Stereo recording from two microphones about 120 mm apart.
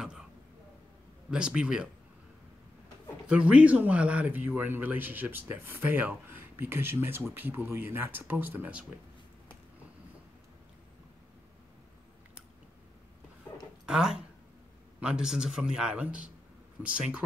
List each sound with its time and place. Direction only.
0.0 s a sound: 5° right (ahead or behind)
1.3 s speech: 5° right (ahead or behind)
3.3 s speech: 10° right (ahead or behind)
13.8 s speech: 5° right (ahead or behind)